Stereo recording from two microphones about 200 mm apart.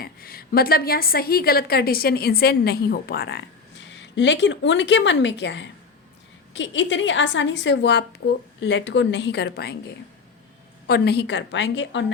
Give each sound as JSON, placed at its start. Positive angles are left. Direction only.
{"t": 0.0, "sound": "a woman's voice", "side_deg": 50}
{"t": 3.8, "sound": "a woman's voice", "side_deg": 65}
{"t": 10.8, "sound": "a woman's voice", "side_deg": 55}